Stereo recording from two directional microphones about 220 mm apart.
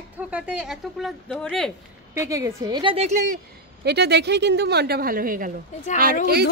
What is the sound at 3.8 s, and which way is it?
A woman's voice, 50° right (ahead or behind).